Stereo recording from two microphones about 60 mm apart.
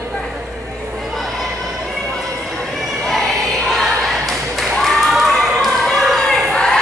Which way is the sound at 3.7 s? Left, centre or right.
Centre.